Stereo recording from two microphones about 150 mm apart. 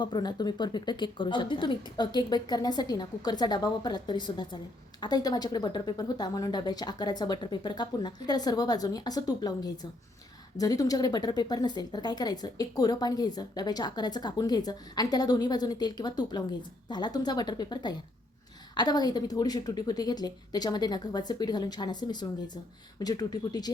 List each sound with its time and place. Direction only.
0.0 s speech: 30° left (ahead or behind)